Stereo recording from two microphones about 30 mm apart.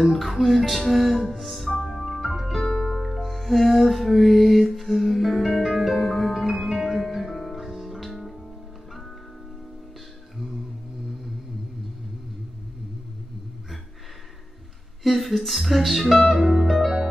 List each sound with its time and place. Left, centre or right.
0.0 s music: centre
2.6 s music: centre
2.9 s music: centre
10.3 s music: centre
15.0 s music: centre